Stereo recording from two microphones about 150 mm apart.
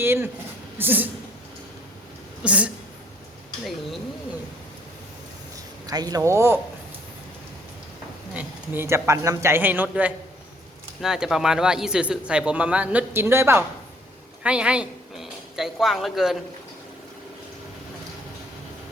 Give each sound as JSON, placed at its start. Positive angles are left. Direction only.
{"t": 0.0, "sound": "speech", "side_deg": -15}
{"t": 2.4, "sound": "speech", "side_deg": -10}
{"t": 5.8, "sound": "speech", "side_deg": -25}
{"t": 8.3, "sound": "a man's voice", "side_deg": -10}